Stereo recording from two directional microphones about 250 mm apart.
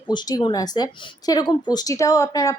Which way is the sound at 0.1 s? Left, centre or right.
Centre.